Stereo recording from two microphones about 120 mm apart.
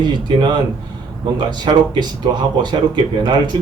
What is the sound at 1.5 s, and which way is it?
Speech, 40° right (ahead or behind).